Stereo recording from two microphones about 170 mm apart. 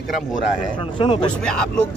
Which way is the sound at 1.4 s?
5° left (ahead or behind).